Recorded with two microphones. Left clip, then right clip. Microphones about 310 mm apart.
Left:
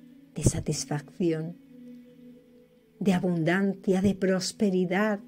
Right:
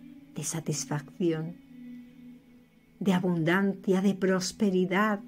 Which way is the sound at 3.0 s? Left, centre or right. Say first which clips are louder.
Left 1 dB; centre.